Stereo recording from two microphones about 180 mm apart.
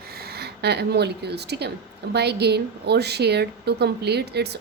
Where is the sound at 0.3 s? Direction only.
65° right (ahead or behind).